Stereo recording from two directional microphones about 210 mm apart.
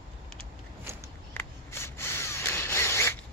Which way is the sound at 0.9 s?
10° right (ahead or behind).